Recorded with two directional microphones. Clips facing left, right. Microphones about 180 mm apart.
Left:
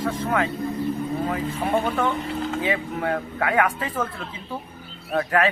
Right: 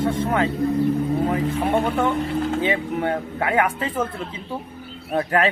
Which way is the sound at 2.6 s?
25° right (ahead or behind).